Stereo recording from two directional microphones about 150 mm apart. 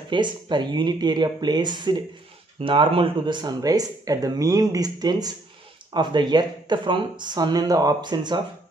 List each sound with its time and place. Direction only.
0.1 s speech: 30° right (ahead or behind)